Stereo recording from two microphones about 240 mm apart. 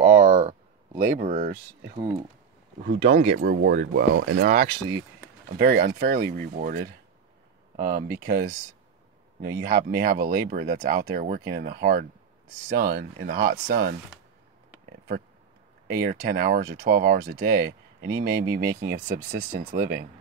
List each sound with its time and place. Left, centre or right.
0.0 s a sound: right
3.0 s speech: right
3.3 s speech: right
5.7 s speech: right
16.0 s speech: right